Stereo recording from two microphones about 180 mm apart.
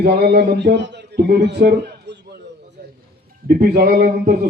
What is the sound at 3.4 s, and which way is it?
Speech, 60° right (ahead or behind).